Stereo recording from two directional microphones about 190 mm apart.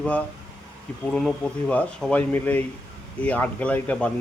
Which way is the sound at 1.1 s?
5° left (ahead or behind).